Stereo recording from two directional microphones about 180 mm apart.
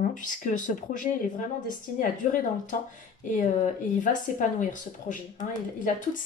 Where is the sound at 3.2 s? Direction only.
45° left (ahead or behind).